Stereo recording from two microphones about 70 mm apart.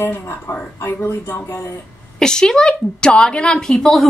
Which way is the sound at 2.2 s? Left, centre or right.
Centre.